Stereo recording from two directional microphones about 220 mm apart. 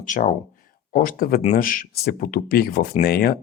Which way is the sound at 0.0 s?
35° left (ahead or behind).